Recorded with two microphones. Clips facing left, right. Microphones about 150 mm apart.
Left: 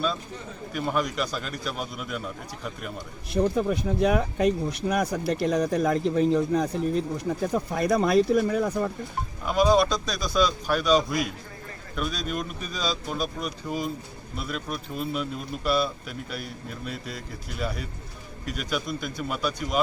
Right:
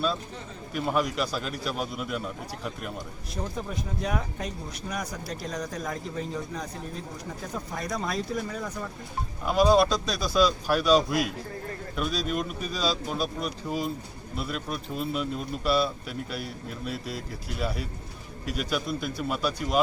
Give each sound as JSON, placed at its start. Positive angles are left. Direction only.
{"t": 0.7, "sound": "speech", "side_deg": 0}
{"t": 3.3, "sound": "speech", "side_deg": 65}
{"t": 9.5, "sound": "speech", "side_deg": -5}